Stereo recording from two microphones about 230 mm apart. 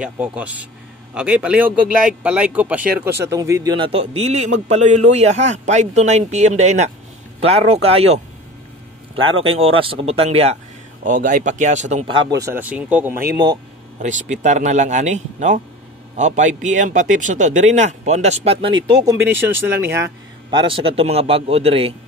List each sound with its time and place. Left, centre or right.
0.0 s a man's voice: centre; by 8.2 s right
9.5 s a man's voice: right
12.3 s speech: centre
13.9 s speech: right
19.1 s speech: centre
20.5 s a man's voice: right